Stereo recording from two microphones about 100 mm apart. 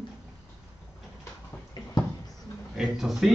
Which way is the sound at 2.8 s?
5° right (ahead or behind).